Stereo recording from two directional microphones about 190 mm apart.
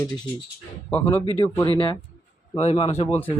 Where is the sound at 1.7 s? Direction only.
25° left (ahead or behind).